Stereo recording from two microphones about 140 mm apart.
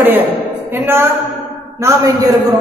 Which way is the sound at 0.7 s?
15° right (ahead or behind).